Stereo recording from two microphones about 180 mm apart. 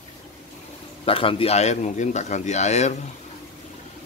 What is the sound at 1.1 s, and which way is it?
Speech, 30° left (ahead or behind).